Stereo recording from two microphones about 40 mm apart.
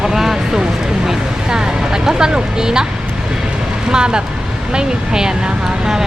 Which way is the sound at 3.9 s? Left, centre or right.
Right.